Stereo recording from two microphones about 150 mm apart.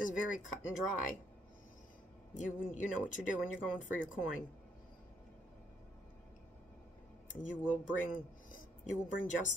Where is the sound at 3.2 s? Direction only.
5° right (ahead or behind).